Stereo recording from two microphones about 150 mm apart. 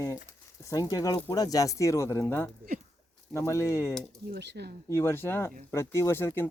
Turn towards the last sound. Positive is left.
turn(degrees=15)  # may be behind; listen again after turning